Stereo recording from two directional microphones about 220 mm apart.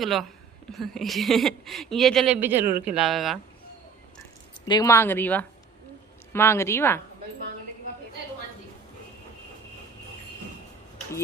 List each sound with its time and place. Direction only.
0.0 s a woman's voice: centre (ahead or behind)
4.2 s speech: 20° left (ahead or behind)